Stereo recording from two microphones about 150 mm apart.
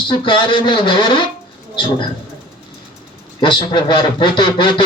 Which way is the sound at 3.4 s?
30° left (ahead or behind).